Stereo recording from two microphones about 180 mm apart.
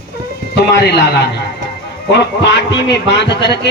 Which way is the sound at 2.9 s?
75° left (ahead or behind).